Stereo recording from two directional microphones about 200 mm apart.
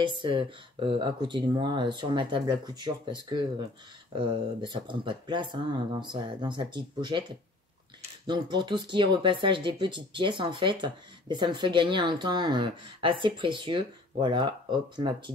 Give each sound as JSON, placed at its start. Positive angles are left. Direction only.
{"t": 0.0, "sound": "speech", "side_deg": -25}
{"t": 8.3, "sound": "speech", "side_deg": -20}